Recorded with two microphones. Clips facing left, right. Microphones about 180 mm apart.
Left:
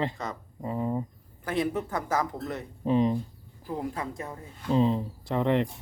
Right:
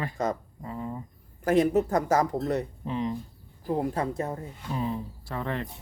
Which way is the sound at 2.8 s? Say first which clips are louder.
Left 6 dB; 20° left (ahead or behind).